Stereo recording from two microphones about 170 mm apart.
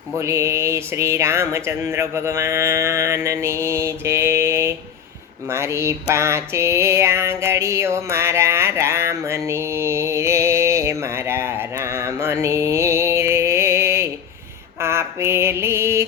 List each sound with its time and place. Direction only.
0.2 s speech: 15° right (ahead or behind)
5.5 s mantra: 15° right (ahead or behind)